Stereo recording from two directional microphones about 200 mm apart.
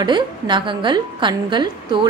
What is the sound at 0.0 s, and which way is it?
A woman's voice, 20° right (ahead or behind).